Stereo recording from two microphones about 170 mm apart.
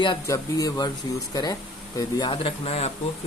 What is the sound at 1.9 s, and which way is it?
Speech, 25° left (ahead or behind).